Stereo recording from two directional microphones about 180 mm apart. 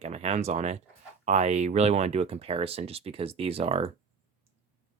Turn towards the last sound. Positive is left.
turn(degrees=-35)  # may be behind; listen again after turning